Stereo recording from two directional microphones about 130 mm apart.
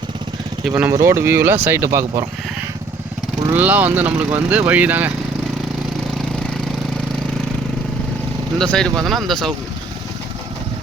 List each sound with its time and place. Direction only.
0.8 s speech: 20° right (ahead or behind)
8.5 s speech: 5° left (ahead or behind)